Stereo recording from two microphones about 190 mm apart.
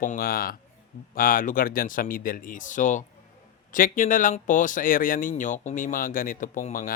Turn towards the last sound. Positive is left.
turn(degrees=45)  # may be behind; listen again after turning